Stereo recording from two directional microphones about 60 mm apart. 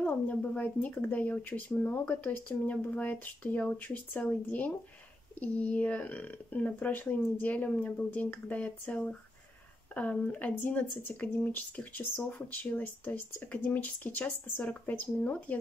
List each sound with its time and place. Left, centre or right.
0.0 s speech: left